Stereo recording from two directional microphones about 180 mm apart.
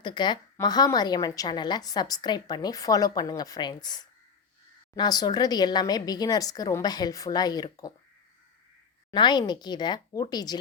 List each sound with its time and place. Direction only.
0.0 s a woman's voice: 25° left (ahead or behind)
9.1 s a woman's voice: 25° left (ahead or behind)